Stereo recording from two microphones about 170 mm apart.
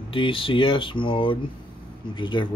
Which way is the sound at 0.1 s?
30° left (ahead or behind).